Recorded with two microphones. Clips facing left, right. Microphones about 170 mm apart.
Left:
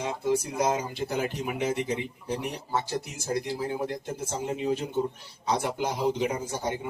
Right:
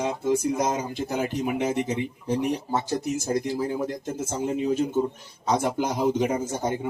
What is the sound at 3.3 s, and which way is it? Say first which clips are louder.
Speech: right 2 dB; 45° right (ahead or behind).